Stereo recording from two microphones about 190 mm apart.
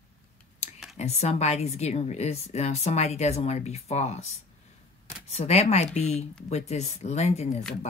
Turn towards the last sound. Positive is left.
turn(degrees=35)  # may be behind; listen again after turning